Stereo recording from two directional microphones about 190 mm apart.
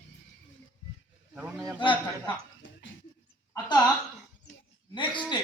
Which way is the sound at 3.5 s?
20° left (ahead or behind).